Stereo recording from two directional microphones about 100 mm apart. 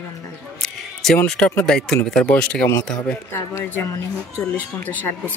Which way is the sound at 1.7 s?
5° left (ahead or behind).